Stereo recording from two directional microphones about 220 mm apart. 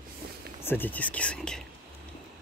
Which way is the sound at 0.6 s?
10° left (ahead or behind).